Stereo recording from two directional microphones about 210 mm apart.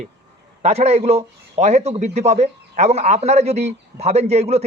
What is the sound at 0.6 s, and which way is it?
A man's voice, 30° right (ahead or behind).